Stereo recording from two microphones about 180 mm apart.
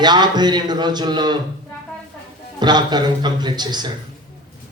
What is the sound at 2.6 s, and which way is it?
Speech, 25° right (ahead or behind).